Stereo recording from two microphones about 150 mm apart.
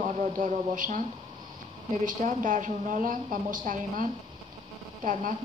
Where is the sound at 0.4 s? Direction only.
60° right (ahead or behind).